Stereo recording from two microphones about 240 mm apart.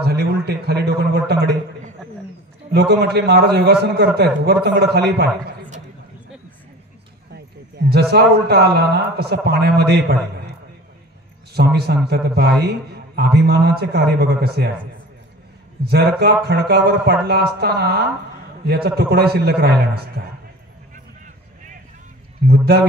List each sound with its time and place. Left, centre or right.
0.0 s a man's voice: right
2.7 s a man's voice: right
7.3 s a man's voice: right
11.5 s a man's voice: right
15.8 s speech: right
22.5 s speech: right